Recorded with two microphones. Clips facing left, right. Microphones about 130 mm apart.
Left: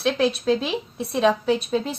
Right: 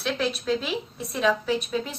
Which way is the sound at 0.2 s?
35° left (ahead or behind).